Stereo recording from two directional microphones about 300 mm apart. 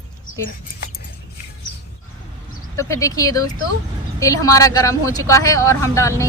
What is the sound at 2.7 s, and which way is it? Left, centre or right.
Speech, centre.